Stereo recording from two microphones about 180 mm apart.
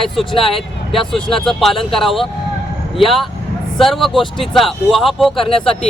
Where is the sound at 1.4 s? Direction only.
Centre (ahead or behind).